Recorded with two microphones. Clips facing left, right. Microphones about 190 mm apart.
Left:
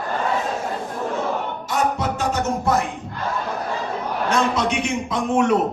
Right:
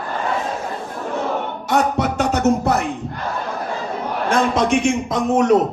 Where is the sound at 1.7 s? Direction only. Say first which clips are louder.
Right 4 dB; 70° right (ahead or behind).